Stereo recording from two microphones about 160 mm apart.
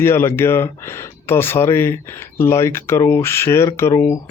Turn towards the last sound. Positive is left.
turn(degrees=20)  # may be behind; listen again after turning